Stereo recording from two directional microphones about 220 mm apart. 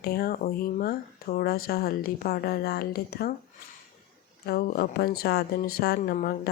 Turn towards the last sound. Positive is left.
turn(degrees=40)  # may be behind; listen again after turning